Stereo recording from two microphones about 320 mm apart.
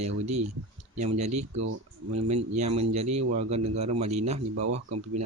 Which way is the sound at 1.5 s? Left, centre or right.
Right.